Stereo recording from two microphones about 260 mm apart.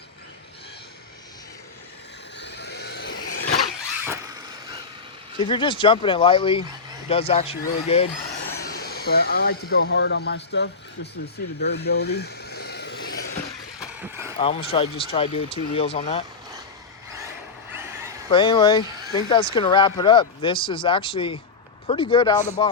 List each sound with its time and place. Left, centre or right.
2.4 s vehicle: left
3.2 s vehicle: left
3.9 s vehicle: centre
5.4 s speech: centre
8.6 s speech: left
11.6 s a sound: left
13.7 s vehicle: centre
14.3 s speech: left
17.7 s a sound: centre
18.3 s speech: centre